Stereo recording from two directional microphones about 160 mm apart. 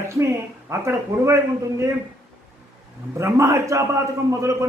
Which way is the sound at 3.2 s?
20° right (ahead or behind).